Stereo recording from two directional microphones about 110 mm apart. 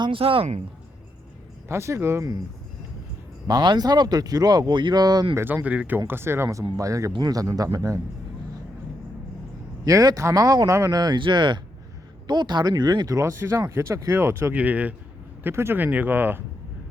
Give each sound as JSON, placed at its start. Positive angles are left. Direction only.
{"t": 0.0, "sound": "speech", "side_deg": -55}
{"t": 1.6, "sound": "speech", "side_deg": -25}
{"t": 3.4, "sound": "speech", "side_deg": -40}
{"t": 5.3, "sound": "speech", "side_deg": -25}
{"t": 9.8, "sound": "speech", "side_deg": -35}
{"t": 13.1, "sound": "speech", "side_deg": -25}